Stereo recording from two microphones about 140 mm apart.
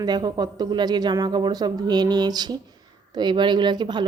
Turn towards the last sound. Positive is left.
turn(degrees=-30)  # may be behind; listen again after turning